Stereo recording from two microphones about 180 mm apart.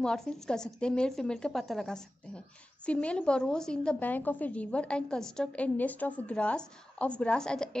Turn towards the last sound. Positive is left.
turn(degrees=5)  # may be behind; listen again after turning